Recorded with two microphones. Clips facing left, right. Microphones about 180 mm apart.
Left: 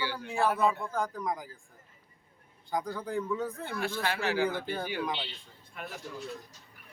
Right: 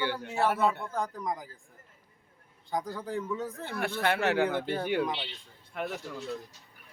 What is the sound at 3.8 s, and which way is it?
Speech, 60° right (ahead or behind).